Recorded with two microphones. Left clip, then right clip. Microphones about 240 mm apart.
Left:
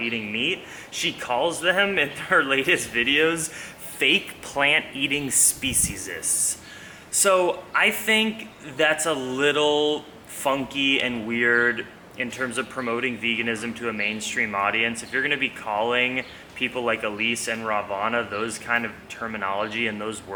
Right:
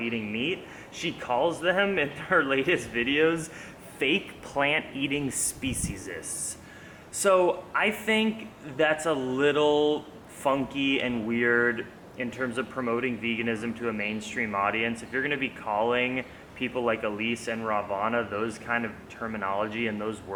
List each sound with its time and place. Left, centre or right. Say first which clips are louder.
0.0 s speech: left 5 dB; centre
7.2 s speech: left 2 dB; centre
9.7 s speech: left 2 dB; right
10.4 s speech: left 3 dB; centre